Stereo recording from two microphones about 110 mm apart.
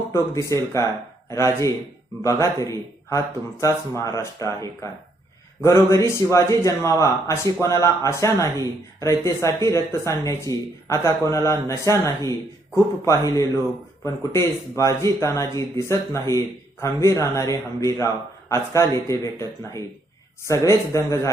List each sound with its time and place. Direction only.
0.5 s speech: 25° left (ahead or behind)